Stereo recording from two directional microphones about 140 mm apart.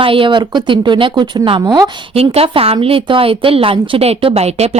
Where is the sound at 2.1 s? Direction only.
45° right (ahead or behind).